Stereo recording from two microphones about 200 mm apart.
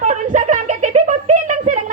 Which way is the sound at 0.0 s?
40° right (ahead or behind).